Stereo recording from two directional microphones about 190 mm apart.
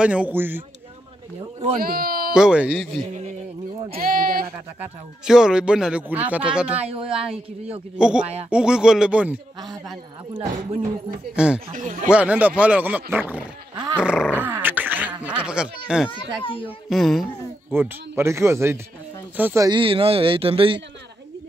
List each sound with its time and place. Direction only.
0.0 s speech: 5° right (ahead or behind)
1.8 s speech: 50° right (ahead or behind)
2.3 s speech: 5° right (ahead or behind)
4.0 s speech: 50° right (ahead or behind)
5.2 s speech: 5° right (ahead or behind)
6.8 s speech: 30° right (ahead or behind)
8.0 s speech: 5° right (ahead or behind)
10.3 s speech: 30° right (ahead or behind)
11.3 s speech: 5° right (ahead or behind)
11.7 s speech: 40° right (ahead or behind)
12.1 s speech: 5° right (ahead or behind)
16.1 s a child's voice: 25° left (ahead or behind)
16.9 s speech: centre (ahead or behind)
17.7 s speech: 15° right (ahead or behind); by 20.8 s 30° right (ahead or behind)